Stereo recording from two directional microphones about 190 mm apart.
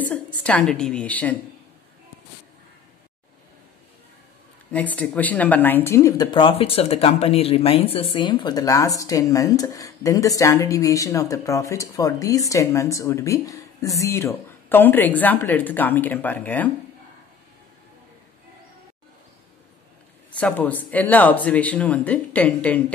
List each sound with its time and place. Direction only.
0.0 s speech: 5° left (ahead or behind)
4.6 s speech: 10° left (ahead or behind)
20.3 s speech: 5° left (ahead or behind)